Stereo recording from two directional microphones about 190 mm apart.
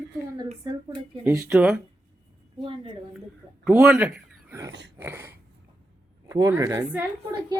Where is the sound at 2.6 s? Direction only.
25° right (ahead or behind).